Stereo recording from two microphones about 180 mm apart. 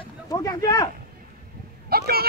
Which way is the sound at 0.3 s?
20° left (ahead or behind).